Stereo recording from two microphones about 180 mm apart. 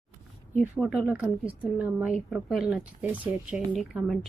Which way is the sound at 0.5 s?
5° right (ahead or behind).